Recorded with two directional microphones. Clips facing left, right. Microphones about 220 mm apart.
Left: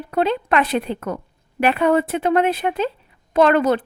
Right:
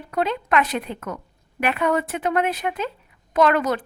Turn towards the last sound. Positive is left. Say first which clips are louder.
# left 4 dB
turn(degrees=30)  # may be behind; listen again after turning